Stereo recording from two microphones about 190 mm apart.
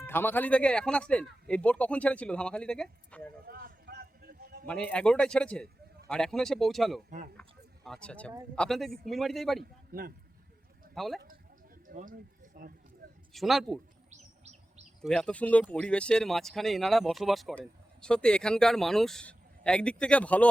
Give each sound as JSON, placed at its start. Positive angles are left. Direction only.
{"t": 0.0, "sound": "speech", "side_deg": 10}
{"t": 3.4, "sound": "a sound", "side_deg": -50}
{"t": 4.6, "sound": "speech", "side_deg": 5}
{"t": 10.9, "sound": "speech", "side_deg": 0}
{"t": 11.9, "sound": "speech", "side_deg": -45}
{"t": 13.3, "sound": "speech", "side_deg": 0}
{"t": 14.1, "sound": "chirp", "side_deg": -35}
{"t": 15.0, "sound": "speech", "side_deg": 5}